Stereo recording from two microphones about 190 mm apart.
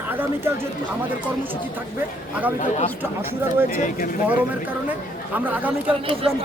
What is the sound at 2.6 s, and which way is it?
Speech, 35° left (ahead or behind).